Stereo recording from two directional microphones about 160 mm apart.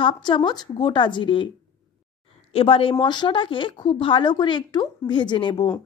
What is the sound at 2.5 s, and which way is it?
A woman's voice, 35° left (ahead or behind).